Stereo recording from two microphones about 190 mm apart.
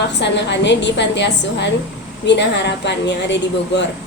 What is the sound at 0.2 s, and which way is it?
A woman's voice, 70° left (ahead or behind).